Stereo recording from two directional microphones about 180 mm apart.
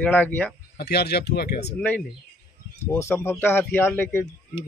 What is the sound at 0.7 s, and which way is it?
Speech, 65° left (ahead or behind).